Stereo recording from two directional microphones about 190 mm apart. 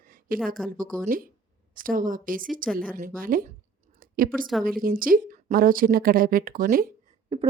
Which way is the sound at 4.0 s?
50° right (ahead or behind).